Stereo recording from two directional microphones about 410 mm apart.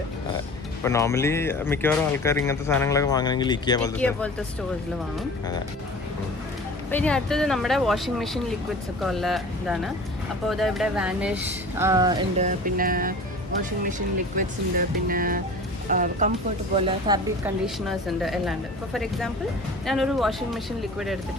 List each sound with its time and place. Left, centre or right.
0.9 s speech: centre
6.9 s speech: centre; by 13.1 s right
14.3 s speech: right; by 18.5 s centre
19.8 s speech: centre